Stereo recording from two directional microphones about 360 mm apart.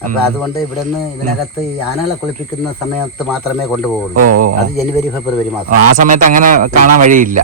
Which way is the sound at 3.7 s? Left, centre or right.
Centre.